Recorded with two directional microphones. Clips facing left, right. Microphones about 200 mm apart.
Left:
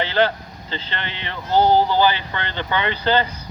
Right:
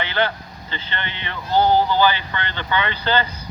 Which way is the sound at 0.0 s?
35° left (ahead or behind).